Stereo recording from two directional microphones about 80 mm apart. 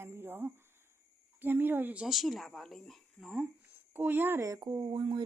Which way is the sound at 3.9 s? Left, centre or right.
Right.